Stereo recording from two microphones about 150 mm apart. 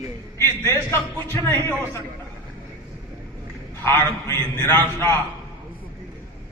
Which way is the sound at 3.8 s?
15° left (ahead or behind).